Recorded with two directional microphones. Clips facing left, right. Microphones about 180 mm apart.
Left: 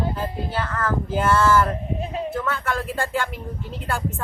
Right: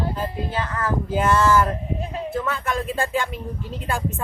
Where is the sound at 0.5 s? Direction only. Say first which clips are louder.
Left 1 dB; 10° right (ahead or behind).